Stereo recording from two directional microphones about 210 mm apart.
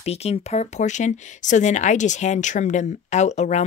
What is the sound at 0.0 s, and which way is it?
Speech, 30° left (ahead or behind).